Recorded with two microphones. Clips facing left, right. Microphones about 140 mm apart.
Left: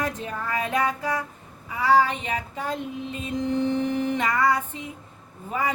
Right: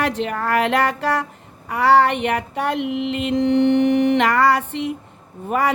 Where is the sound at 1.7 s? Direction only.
70° right (ahead or behind).